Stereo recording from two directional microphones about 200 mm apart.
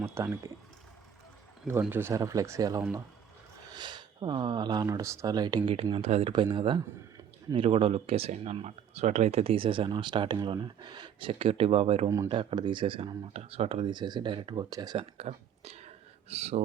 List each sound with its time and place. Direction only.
0.0 s speech: 15° right (ahead or behind)
1.8 s speech: 10° right (ahead or behind); by 12.0 s 30° right (ahead or behind)
12.0 s speech: 15° right (ahead or behind); by 16.6 s 30° right (ahead or behind)